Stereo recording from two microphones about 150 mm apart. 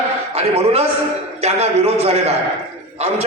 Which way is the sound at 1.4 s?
45° right (ahead or behind).